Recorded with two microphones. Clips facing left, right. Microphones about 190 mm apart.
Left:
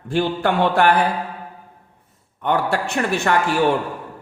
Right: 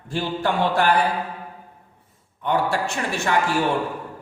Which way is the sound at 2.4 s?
60° left (ahead or behind).